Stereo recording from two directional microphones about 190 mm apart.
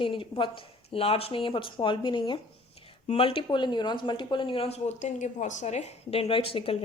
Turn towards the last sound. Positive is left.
turn(degrees=30)  # may be behind; listen again after turning